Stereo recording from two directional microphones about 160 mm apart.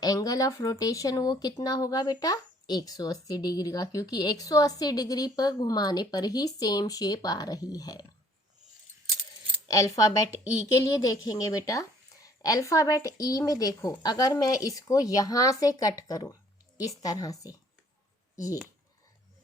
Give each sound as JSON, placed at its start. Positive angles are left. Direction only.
{"t": 0.0, "sound": "speech", "side_deg": 20}
{"t": 9.6, "sound": "speech", "side_deg": 20}
{"t": 16.3, "sound": "a sound", "side_deg": 20}
{"t": 17.0, "sound": "speech", "side_deg": 20}